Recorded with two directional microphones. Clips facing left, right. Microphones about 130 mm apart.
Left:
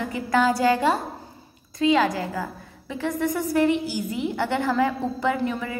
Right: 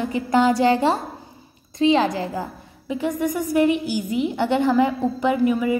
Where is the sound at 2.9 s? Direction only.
15° right (ahead or behind).